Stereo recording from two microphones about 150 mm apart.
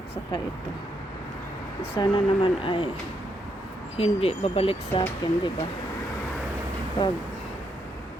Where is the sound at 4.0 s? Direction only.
40° left (ahead or behind).